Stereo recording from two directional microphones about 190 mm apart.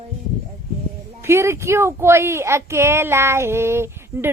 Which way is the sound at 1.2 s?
15° right (ahead or behind).